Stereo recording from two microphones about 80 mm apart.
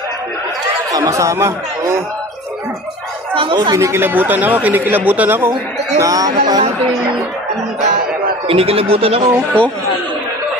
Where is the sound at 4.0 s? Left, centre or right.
Right.